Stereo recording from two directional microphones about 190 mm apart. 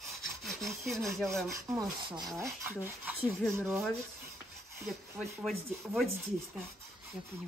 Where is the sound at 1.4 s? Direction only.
15° right (ahead or behind).